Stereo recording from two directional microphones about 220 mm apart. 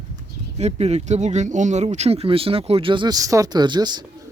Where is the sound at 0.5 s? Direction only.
30° right (ahead or behind).